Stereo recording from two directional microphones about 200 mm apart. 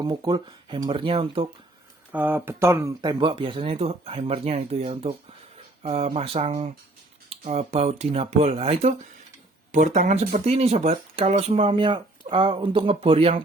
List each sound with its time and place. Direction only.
0.0 s speech: 20° right (ahead or behind)
2.1 s speech: 10° right (ahead or behind); by 13.4 s 30° right (ahead or behind)